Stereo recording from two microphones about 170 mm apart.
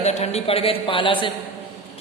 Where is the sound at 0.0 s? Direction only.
40° left (ahead or behind).